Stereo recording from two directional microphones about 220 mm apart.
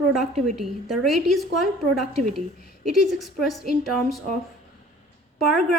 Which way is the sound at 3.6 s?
45° left (ahead or behind).